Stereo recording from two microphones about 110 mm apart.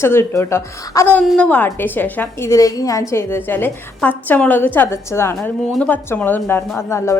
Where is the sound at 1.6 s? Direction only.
20° left (ahead or behind).